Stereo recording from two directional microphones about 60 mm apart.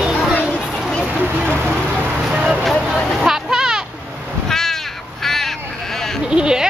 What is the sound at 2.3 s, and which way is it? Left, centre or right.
Vehicle, centre.